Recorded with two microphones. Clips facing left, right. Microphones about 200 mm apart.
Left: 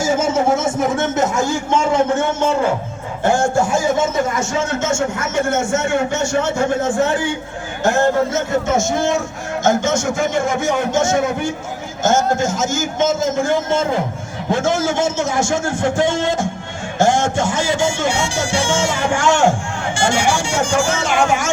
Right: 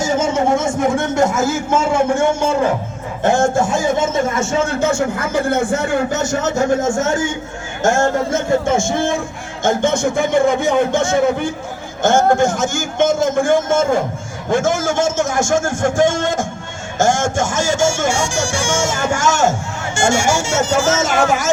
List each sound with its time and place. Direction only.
0.0 s speech: 5° left (ahead or behind); by 2.5 s 10° right (ahead or behind)
3.2 s a man's voice: 20° right (ahead or behind)
4.8 s a man's voice: 35° right (ahead or behind)